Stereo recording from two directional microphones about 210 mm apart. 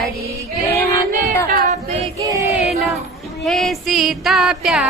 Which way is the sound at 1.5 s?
35° right (ahead or behind).